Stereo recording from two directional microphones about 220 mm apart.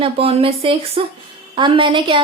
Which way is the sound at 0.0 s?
25° right (ahead or behind).